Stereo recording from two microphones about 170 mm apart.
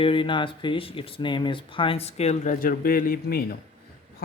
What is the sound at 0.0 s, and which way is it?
Speech, 30° left (ahead or behind).